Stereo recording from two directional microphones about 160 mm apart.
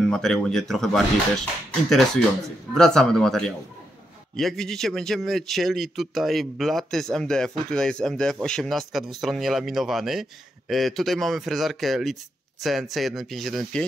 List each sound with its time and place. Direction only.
0.1 s speech: centre (ahead or behind)
2.7 s speech: 5° left (ahead or behind)